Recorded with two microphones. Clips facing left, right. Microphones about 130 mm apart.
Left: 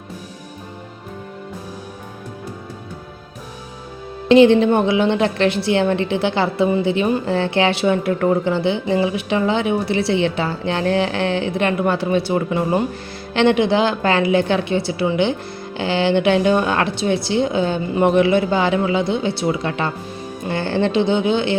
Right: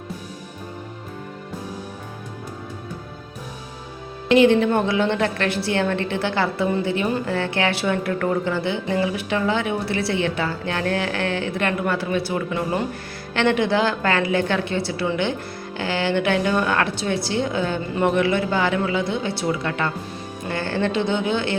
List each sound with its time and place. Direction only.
4.3 s a woman's voice: 25° left (ahead or behind)